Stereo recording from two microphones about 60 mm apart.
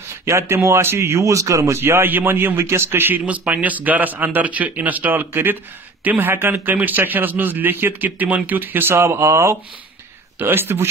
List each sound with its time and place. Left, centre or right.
0.2 s speech: right
1.3 s speech: right
1.8 s a man's voice: right
3.3 s a man's voice: right
8.9 s speech: right
10.4 s a man's voice: right